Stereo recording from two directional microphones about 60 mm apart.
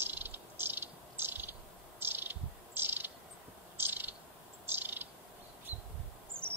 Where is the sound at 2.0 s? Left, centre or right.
Right.